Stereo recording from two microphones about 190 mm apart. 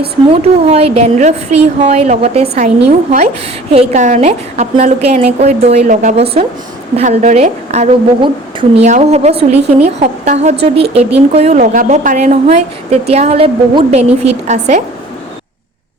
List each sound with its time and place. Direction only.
0.3 s a woman's voice: 35° right (ahead or behind)
3.7 s a woman's voice: 35° right (ahead or behind)